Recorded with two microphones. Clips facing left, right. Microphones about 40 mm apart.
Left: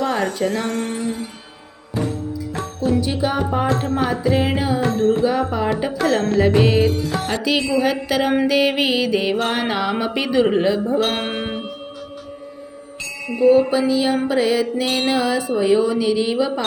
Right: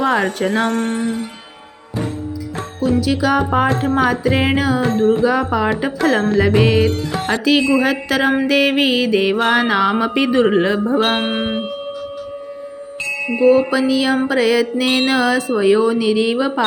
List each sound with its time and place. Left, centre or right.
0.0 s music: right
0.3 s speech: right
0.7 s music: right
3.0 s music: right
3.9 s speech: right
4.9 s music: right
5.2 s speech: right
6.4 s music: right
10.5 s speech: right
11.2 s music: right
13.0 s music: right
13.4 s speech: right